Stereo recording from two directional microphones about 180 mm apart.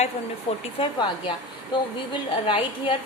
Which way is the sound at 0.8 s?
25° left (ahead or behind).